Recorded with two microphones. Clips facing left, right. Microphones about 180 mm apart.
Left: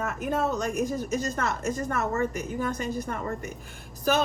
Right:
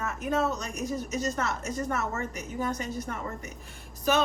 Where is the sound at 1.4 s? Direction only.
55° left (ahead or behind).